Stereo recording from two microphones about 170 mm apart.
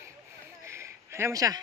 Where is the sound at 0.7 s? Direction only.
15° right (ahead or behind).